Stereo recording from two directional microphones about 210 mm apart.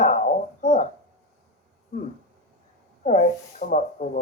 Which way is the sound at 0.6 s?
35° left (ahead or behind).